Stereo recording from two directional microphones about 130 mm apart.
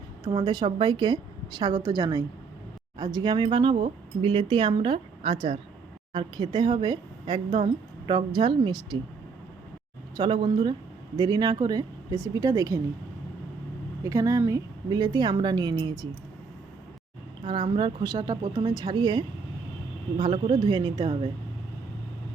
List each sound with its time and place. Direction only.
0.3 s speech: 35° right (ahead or behind)
10.2 s speech: 35° right (ahead or behind)
14.0 s speech: 25° right (ahead or behind)
17.4 s speech: 40° right (ahead or behind)